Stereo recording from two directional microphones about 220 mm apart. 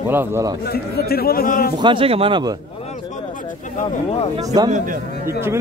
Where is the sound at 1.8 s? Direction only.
20° right (ahead or behind).